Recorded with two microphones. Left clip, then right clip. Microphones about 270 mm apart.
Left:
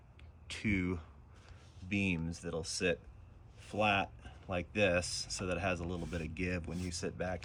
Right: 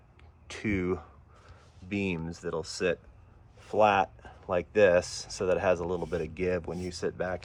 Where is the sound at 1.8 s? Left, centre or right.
Centre.